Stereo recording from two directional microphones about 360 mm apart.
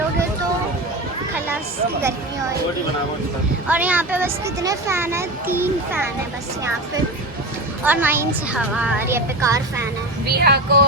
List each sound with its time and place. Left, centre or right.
3.7 s speech: centre
7.9 s speech: centre
10.2 s speech: right